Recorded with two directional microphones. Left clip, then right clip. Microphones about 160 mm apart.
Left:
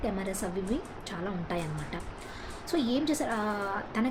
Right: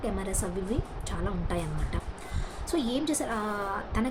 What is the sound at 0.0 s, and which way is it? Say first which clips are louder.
Speech: even; 10° right (ahead or behind).